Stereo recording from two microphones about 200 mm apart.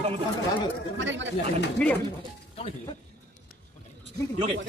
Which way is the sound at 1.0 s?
65° right (ahead or behind).